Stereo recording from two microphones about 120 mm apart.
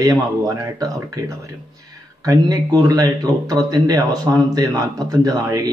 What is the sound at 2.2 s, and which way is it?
Speech, 30° right (ahead or behind).